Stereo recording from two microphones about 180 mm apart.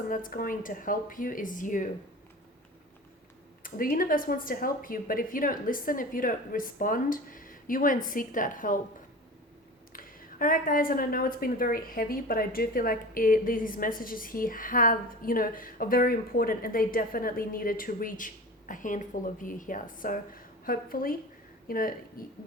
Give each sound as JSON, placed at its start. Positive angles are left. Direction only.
{"t": 0.1, "sound": "a woman's voice", "side_deg": 50}
{"t": 3.6, "sound": "a woman's voice", "side_deg": 50}
{"t": 9.9, "sound": "a woman's voice", "side_deg": 50}